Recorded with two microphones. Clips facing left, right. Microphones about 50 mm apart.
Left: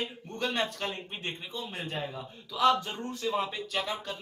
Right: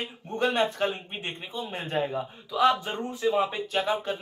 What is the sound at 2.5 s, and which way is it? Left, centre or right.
A man's voice, centre.